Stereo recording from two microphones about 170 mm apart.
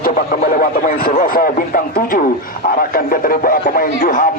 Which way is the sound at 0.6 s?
60° left (ahead or behind).